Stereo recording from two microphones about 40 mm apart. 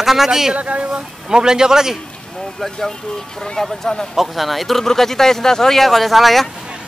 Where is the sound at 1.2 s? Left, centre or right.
Centre.